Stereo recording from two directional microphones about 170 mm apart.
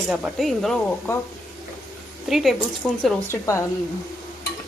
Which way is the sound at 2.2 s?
Centre (ahead or behind).